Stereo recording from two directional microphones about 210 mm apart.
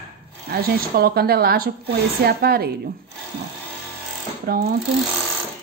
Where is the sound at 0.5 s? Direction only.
45° right (ahead or behind).